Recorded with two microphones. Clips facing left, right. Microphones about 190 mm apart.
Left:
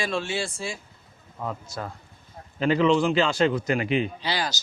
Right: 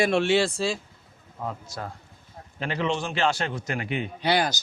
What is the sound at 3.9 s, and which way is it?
Speech, 90° left.